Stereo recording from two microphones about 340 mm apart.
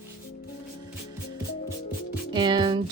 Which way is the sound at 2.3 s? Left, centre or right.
Centre.